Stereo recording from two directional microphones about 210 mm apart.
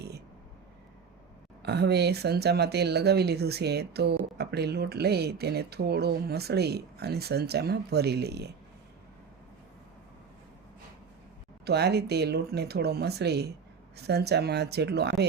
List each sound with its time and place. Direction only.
1.6 s speech: 50° right (ahead or behind)
11.6 s speech: 50° right (ahead or behind)